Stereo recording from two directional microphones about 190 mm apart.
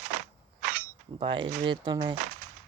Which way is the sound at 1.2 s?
25° right (ahead or behind).